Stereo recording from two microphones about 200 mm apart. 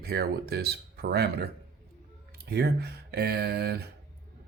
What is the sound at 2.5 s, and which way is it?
Speech, 55° right (ahead or behind).